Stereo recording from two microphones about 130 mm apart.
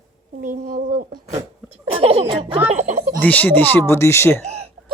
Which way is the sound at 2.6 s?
65° right (ahead or behind).